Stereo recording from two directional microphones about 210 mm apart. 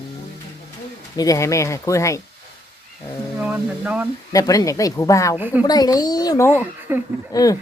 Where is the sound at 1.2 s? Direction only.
15° left (ahead or behind).